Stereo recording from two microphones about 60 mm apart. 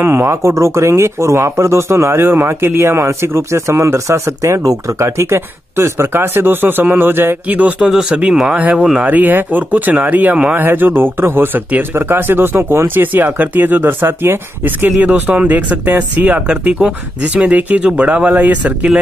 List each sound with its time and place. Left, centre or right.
0.0 s speech: right
7.4 s speech: right
16.4 s speech: centre